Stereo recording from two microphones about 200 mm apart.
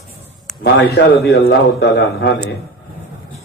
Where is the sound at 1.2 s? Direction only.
55° left (ahead or behind).